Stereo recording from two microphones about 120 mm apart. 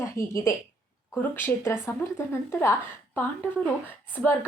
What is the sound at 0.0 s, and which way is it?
A woman's voice, 25° left (ahead or behind).